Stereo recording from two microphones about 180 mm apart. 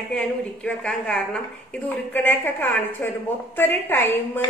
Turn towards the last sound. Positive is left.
turn(degrees=15)  # may be behind; listen again after turning